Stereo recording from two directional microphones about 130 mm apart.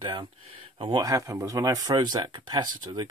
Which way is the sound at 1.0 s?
25° right (ahead or behind).